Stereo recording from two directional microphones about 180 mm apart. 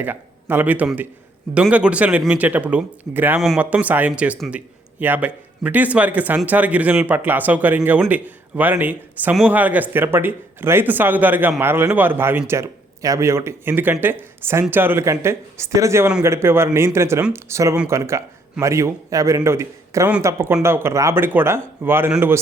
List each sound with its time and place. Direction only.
0.0 s speech: 10° right (ahead or behind)